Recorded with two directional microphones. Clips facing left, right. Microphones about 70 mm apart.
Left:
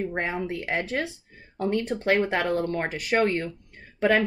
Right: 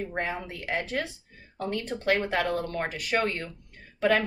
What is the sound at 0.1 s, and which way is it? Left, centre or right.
Speech, left.